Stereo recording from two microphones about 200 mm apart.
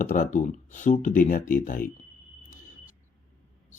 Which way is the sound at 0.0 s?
40° left (ahead or behind).